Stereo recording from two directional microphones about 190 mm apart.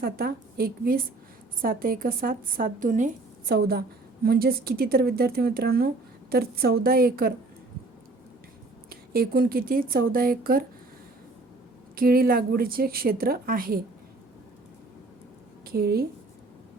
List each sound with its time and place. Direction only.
0.0 s a woman's voice: 55° right (ahead or behind)
8.9 s a woman's voice: 50° right (ahead or behind)
11.9 s a woman's voice: 50° right (ahead or behind)
15.6 s a woman's voice: 55° right (ahead or behind)